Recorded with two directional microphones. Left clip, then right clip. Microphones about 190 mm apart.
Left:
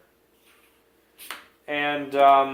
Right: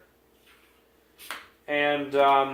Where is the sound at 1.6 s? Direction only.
45° left (ahead or behind).